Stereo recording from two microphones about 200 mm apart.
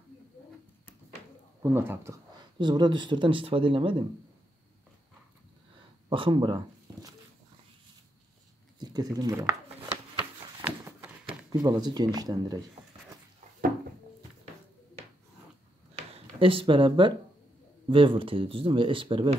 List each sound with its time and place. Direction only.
1.6 s speech: 10° right (ahead or behind)
2.6 s speech: 20° right (ahead or behind)
6.0 s speech: 25° right (ahead or behind)
8.7 s speech: 20° right (ahead or behind)
10.6 s a sound: 10° right (ahead or behind)
11.2 s speech: 20° right (ahead or behind)
16.1 s speech: 25° right (ahead or behind)